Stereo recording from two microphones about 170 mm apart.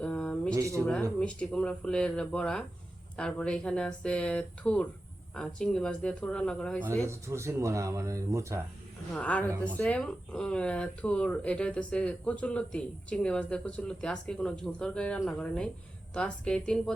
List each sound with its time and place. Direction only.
0.0 s a sound: 5° left (ahead or behind)
0.5 s speech: 15° right (ahead or behind)
1.2 s speech: 5° left (ahead or behind)
7.0 s speech: 15° right (ahead or behind)
9.1 s speech: 10° left (ahead or behind)